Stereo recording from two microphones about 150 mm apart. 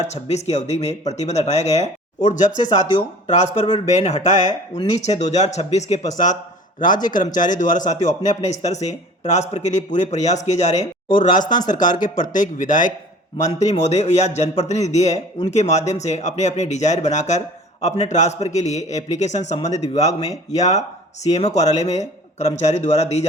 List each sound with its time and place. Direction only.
0.0 s a man's voice: 45° left (ahead or behind)
20.1 s speech: 25° left (ahead or behind)
20.5 s a man's voice: 50° left (ahead or behind)